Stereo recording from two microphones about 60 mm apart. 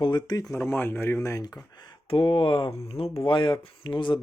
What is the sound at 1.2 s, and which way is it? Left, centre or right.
Speech, left.